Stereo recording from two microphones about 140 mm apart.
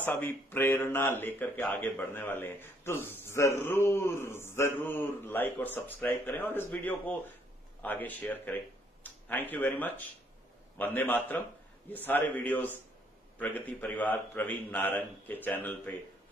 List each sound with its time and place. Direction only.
0.0 s speech: 15° left (ahead or behind)